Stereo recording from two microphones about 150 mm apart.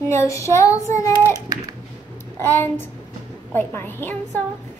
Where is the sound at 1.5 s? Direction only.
25° right (ahead or behind).